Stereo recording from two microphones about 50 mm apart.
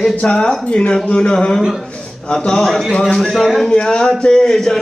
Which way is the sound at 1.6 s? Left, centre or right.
Centre.